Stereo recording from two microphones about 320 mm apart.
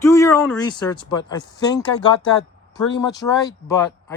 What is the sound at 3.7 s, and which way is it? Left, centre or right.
Speech, centre.